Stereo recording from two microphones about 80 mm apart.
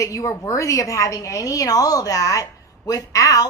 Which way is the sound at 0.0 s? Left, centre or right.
Left.